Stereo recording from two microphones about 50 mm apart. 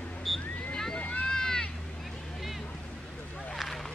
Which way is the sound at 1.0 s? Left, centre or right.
Left.